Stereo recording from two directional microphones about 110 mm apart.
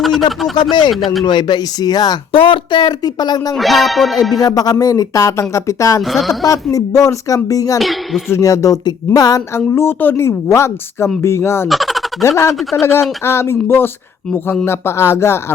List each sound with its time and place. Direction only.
0.0 s speech: centre (ahead or behind)
0.5 s speech: 40° left (ahead or behind)
2.3 s speech: 50° left (ahead or behind)
3.5 s music: centre (ahead or behind)
4.4 s speech: 35° left (ahead or behind)
6.0 s music: centre (ahead or behind)
6.4 s speech: 30° left (ahead or behind)
7.8 s speech: centre (ahead or behind)
8.3 s a woman's voice: 30° left (ahead or behind)
9.6 s a woman's voice: 20° left (ahead or behind)
11.7 s a sound: centre (ahead or behind)
12.8 s a woman's voice: 25° left (ahead or behind)